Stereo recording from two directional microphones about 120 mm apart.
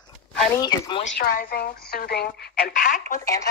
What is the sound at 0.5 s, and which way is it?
Speech, 35° left (ahead or behind).